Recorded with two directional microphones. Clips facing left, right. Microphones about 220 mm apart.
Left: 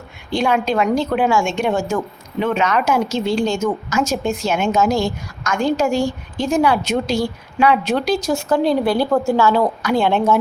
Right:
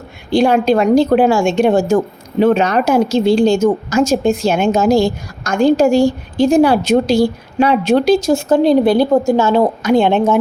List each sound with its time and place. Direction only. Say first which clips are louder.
0.3 s a woman's voice: right 7 dB; 35° right (ahead or behind)